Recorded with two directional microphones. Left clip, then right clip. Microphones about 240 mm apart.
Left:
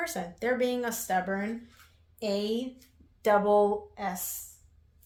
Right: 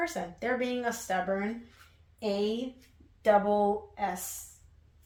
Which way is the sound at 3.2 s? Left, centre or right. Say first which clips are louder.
Left 2 dB; left.